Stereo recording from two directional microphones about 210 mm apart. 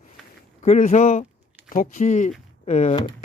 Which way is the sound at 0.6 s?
35° left (ahead or behind).